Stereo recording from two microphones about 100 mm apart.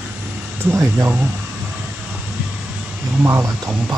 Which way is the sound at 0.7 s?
20° right (ahead or behind).